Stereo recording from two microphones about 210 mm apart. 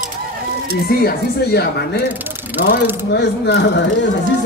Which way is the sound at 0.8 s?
50° left (ahead or behind).